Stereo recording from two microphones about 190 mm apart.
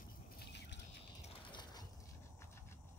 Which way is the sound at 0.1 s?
50° left (ahead or behind).